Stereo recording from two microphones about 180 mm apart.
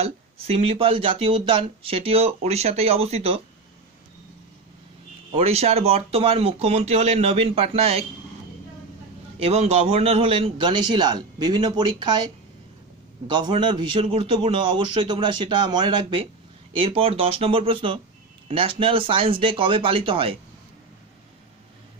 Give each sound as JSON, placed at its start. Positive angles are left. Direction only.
{"t": 0.0, "sound": "speech", "side_deg": -35}
{"t": 5.3, "sound": "speech", "side_deg": -35}
{"t": 9.4, "sound": "a man's voice", "side_deg": -35}
{"t": 13.4, "sound": "a man's voice", "side_deg": -25}